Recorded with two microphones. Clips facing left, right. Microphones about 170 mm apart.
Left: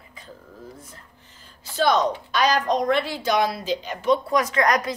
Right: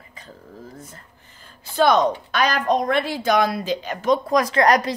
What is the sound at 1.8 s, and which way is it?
Speech, 55° right (ahead or behind).